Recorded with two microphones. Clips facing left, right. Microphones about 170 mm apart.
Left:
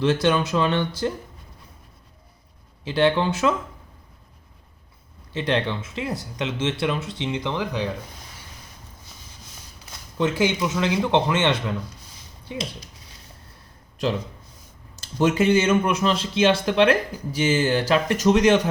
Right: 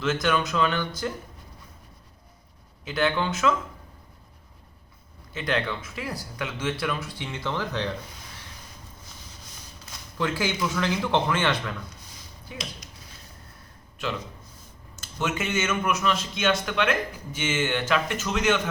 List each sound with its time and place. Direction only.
0.0 s speech: 30° left (ahead or behind)
2.8 s speech: 30° left (ahead or behind)
5.3 s speech: 30° left (ahead or behind); by 7.9 s 10° left (ahead or behind)
10.2 s speech: 20° left (ahead or behind)
14.9 s a man's voice: 35° left (ahead or behind)